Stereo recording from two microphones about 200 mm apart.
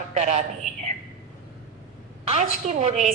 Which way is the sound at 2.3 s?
35° right (ahead or behind).